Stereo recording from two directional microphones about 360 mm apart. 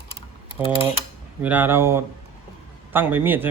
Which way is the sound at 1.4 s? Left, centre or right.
Centre.